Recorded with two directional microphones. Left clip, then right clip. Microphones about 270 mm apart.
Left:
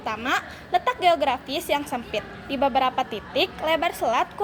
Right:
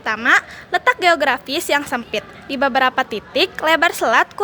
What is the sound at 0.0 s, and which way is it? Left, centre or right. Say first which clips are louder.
A woman's voice: right 10 dB; right.